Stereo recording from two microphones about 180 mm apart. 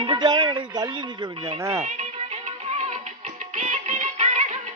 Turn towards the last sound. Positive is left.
turn(degrees=-40)  # may be behind; listen again after turning